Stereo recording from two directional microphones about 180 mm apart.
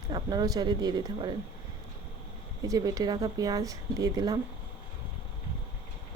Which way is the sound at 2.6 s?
20° right (ahead or behind).